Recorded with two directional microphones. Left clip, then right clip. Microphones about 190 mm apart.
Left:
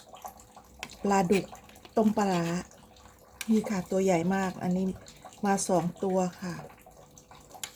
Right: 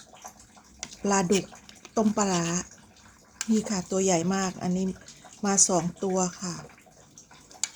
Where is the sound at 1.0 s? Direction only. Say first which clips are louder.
Right 1 dB; 10° right (ahead or behind).